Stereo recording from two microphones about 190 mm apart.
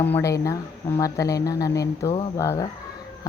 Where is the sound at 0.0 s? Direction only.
10° left (ahead or behind).